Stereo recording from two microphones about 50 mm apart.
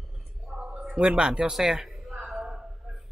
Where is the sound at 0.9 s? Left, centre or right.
Centre.